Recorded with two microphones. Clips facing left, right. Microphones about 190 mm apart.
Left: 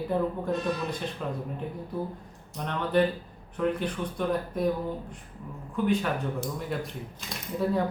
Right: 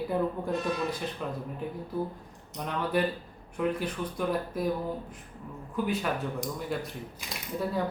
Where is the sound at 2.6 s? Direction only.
5° right (ahead or behind).